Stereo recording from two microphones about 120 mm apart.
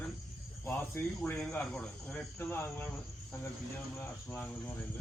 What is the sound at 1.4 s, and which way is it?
Speech, 10° left (ahead or behind).